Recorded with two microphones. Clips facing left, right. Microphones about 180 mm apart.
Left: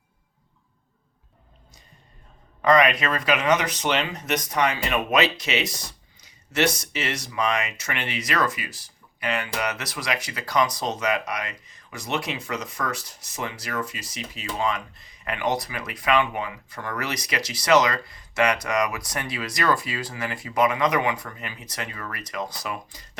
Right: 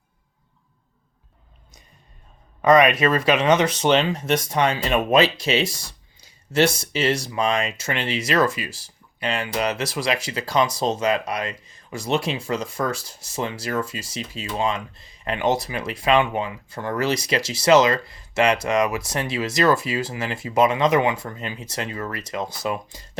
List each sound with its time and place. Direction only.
2.6 s speech: 20° right (ahead or behind)